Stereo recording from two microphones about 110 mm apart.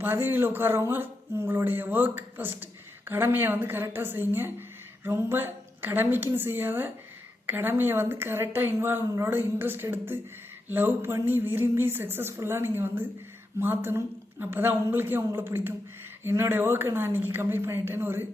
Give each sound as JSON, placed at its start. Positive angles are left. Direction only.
{"t": 0.0, "sound": "a woman's voice", "side_deg": -20}